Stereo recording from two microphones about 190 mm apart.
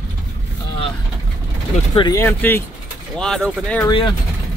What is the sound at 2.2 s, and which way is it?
Speech, 10° left (ahead or behind).